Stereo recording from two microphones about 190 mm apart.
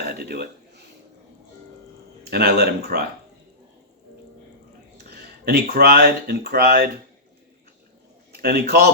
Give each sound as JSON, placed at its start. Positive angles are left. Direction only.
{"t": 0.1, "sound": "a man's voice", "side_deg": -55}
{"t": 2.3, "sound": "speech", "side_deg": -55}
{"t": 5.1, "sound": "speech", "side_deg": -55}
{"t": 8.4, "sound": "a man's voice", "side_deg": -55}